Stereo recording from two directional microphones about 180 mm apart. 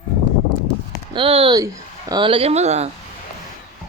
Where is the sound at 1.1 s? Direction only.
30° right (ahead or behind).